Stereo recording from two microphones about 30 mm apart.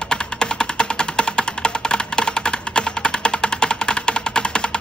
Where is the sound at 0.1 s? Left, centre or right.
Left.